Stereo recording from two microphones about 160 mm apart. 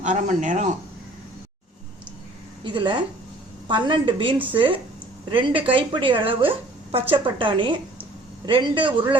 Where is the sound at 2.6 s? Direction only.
30° right (ahead or behind).